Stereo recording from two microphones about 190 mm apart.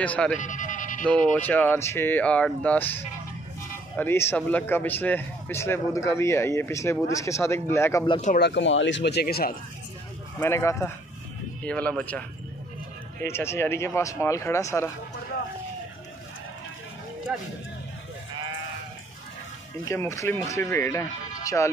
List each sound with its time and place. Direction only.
0.0 s a man's voice: 5° left (ahead or behind)
0.4 s music: 40° left (ahead or behind)
1.0 s a man's voice: 5° left (ahead or behind)
8.4 s speech: 65° left (ahead or behind)
10.4 s a man's voice: 15° left (ahead or behind)
19.8 s a man's voice: 15° left (ahead or behind)